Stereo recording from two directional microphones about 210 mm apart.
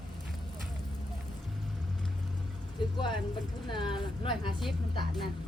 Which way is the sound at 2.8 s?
20° left (ahead or behind).